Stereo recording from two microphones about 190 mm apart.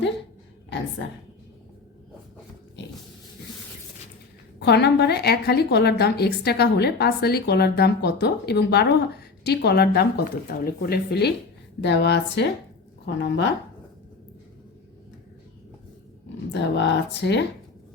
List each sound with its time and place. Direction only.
1.0 s speech: 70° left (ahead or behind)
4.6 s a woman's voice: 65° left (ahead or behind)
16.5 s speech: 70° left (ahead or behind)